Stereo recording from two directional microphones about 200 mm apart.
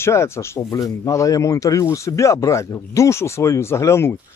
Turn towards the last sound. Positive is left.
turn(degrees=15)  # may be behind; listen again after turning